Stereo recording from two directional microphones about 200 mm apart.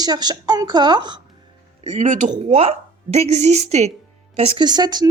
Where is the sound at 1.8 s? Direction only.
35° right (ahead or behind).